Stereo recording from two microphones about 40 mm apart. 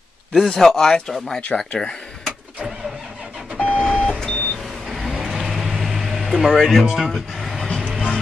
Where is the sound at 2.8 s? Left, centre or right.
Centre.